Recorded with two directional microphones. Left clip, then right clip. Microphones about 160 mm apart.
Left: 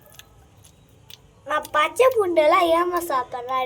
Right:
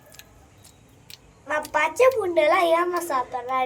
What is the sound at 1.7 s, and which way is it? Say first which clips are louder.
A woman's voice: left 1 dB; 35° left (ahead or behind).